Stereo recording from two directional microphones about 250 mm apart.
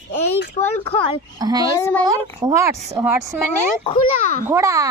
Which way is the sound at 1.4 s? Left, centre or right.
Centre.